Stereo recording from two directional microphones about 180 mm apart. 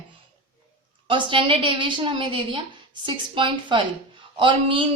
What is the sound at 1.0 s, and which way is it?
A woman's voice, 30° right (ahead or behind).